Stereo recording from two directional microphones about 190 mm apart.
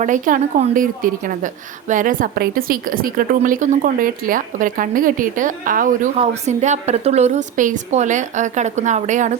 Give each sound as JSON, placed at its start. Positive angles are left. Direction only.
{"t": 0.0, "sound": "a woman's voice", "side_deg": -45}